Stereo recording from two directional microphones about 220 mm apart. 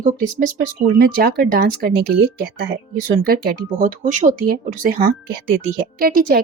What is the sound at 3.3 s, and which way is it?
Speech, 40° right (ahead or behind).